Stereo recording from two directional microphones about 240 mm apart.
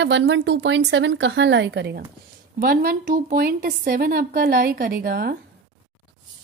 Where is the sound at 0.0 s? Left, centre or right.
Right.